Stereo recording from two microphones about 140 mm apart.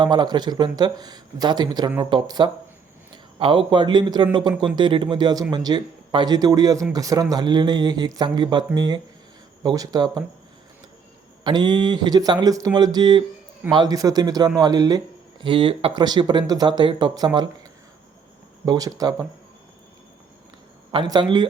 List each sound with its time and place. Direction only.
0.0 s speech: 30° right (ahead or behind)
11.4 s speech: 30° right (ahead or behind)
20.9 s speech: 35° right (ahead or behind)